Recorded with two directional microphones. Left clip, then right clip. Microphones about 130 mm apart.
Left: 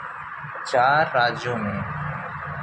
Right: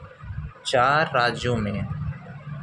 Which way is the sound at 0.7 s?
90° right.